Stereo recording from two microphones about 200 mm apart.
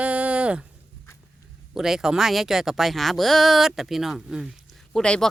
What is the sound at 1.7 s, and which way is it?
Speech, centre (ahead or behind).